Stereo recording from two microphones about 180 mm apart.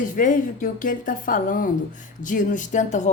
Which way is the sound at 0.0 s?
45° left (ahead or behind).